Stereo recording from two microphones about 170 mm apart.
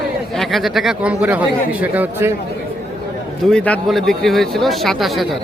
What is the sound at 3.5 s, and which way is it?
Speech, 5° left (ahead or behind).